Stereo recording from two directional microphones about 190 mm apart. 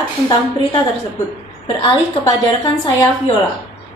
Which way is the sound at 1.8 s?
20° left (ahead or behind).